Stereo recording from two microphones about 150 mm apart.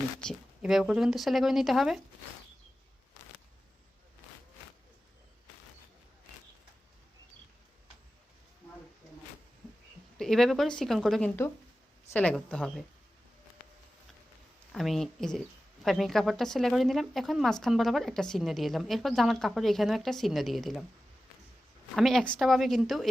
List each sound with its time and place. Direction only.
0.6 s a woman's voice: 5° right (ahead or behind)
10.2 s a woman's voice: 5° left (ahead or behind)
14.7 s a woman's voice: centre (ahead or behind)
21.9 s a woman's voice: centre (ahead or behind)